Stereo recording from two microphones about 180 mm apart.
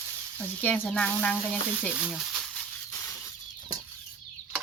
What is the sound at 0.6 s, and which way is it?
Speech, 10° left (ahead or behind).